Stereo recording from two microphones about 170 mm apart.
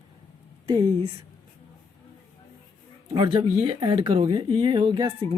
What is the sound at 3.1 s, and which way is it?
Speech, 30° right (ahead or behind).